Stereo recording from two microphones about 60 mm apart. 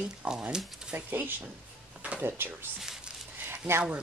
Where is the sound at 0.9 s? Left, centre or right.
Right.